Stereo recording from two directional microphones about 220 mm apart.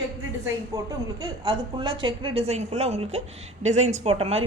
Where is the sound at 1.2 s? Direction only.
20° right (ahead or behind).